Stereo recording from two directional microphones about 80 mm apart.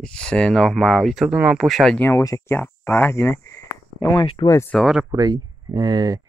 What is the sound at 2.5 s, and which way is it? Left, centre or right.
Speech, left.